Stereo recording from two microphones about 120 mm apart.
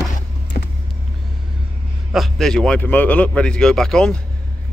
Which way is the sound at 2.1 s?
Centre (ahead or behind).